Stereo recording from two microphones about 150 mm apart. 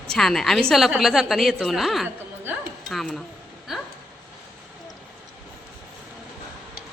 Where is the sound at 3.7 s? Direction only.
Centre (ahead or behind).